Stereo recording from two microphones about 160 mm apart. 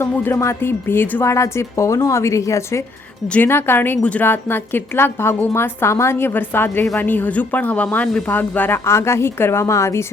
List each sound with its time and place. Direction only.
0.0 s a woman's voice: 15° left (ahead or behind)